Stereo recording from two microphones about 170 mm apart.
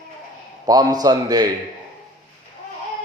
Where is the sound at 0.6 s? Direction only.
25° right (ahead or behind).